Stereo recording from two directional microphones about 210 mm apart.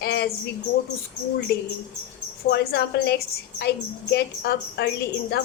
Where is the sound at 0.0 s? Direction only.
50° left (ahead or behind).